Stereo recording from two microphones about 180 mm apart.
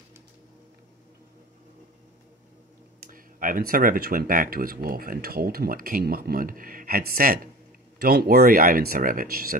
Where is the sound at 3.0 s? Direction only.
50° right (ahead or behind).